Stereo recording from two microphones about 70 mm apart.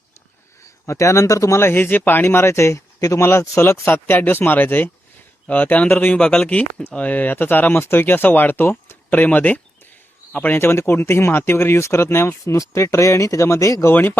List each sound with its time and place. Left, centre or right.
0.9 s speech: left
6.1 s speech: centre
10.6 s speech: left
13.8 s speech: left